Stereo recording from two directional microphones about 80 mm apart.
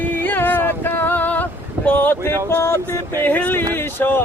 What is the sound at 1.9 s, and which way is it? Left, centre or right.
Speech, left.